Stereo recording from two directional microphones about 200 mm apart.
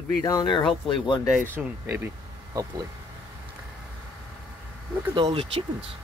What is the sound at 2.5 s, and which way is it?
Speech, 20° right (ahead or behind).